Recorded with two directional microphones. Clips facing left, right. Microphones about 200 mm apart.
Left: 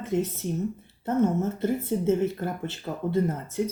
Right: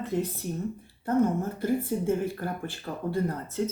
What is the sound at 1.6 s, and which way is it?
Speech, 25° left (ahead or behind).